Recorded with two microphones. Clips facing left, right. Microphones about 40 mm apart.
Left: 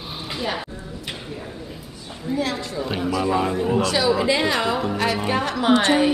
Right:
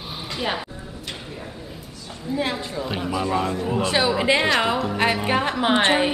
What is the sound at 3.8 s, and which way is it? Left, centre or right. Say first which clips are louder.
A woman's voice: right 2 dB; right.